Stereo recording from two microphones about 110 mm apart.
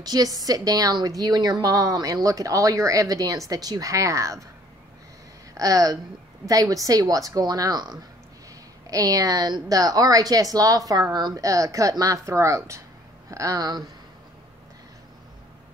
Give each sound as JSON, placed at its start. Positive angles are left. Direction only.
{"t": 0.0, "sound": "a woman's voice", "side_deg": -35}
{"t": 5.5, "sound": "a woman's voice", "side_deg": -30}